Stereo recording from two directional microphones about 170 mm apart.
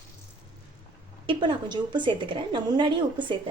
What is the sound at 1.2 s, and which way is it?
A woman's voice, 30° right (ahead or behind).